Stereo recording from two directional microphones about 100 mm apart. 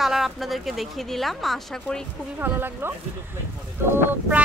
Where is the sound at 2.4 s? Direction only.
20° right (ahead or behind).